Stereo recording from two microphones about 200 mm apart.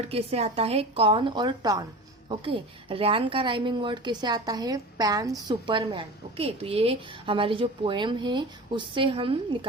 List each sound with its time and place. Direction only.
0.1 s a woman's voice: 30° right (ahead or behind)